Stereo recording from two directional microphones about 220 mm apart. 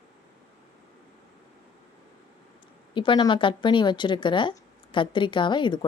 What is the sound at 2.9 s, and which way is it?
Speech, 20° left (ahead or behind).